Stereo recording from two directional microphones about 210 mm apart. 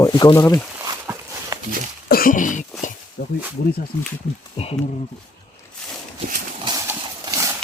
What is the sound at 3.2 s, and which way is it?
Snake, 50° left (ahead or behind).